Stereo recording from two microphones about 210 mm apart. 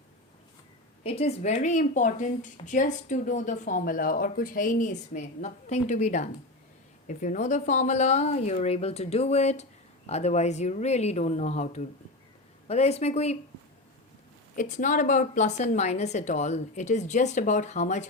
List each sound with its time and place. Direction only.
1.0 s speech: 30° left (ahead or behind)
14.5 s speech: 40° left (ahead or behind)